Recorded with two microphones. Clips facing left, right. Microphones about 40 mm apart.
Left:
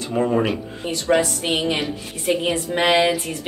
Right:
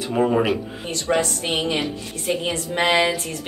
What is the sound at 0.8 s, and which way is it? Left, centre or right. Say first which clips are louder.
A woman's voice: left 3 dB; centre.